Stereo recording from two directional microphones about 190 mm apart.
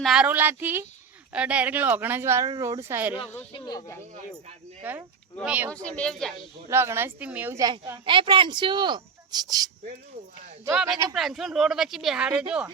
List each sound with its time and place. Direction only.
0.0 s speech: 5° right (ahead or behind)
3.5 s speech: 20° left (ahead or behind)
4.8 s speech: 10° right (ahead or behind)
5.7 s speech: 5° left (ahead or behind)
6.7 s a woman's voice: 15° right (ahead or behind)
10.7 s speech: 5° right (ahead or behind)